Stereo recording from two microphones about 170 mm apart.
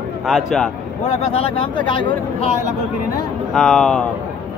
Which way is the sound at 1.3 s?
30° left (ahead or behind).